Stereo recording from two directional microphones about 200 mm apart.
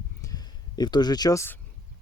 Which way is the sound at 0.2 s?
20° left (ahead or behind).